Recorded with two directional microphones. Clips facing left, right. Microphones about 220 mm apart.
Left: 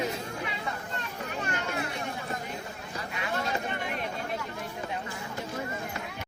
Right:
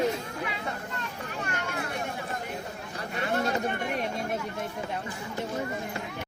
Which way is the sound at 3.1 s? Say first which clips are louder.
Right 4 dB; 45° right (ahead or behind).